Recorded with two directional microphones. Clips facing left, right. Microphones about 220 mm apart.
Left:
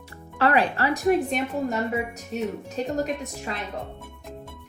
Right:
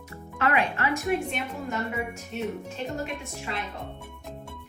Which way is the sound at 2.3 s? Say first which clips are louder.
Left 4 dB; 40° left (ahead or behind).